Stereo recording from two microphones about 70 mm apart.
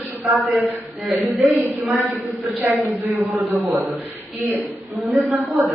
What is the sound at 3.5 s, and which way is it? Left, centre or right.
A man's voice, right.